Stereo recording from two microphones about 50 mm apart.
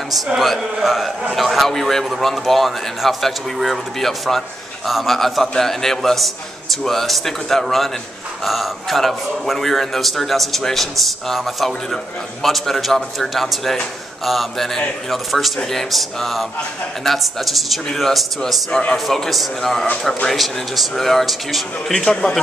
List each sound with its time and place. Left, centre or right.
0.4 s a man's voice: centre
18.7 s speech: centre
19.0 s a man's voice: centre